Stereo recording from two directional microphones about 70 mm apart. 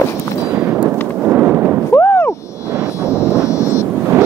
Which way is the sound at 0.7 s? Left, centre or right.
Right.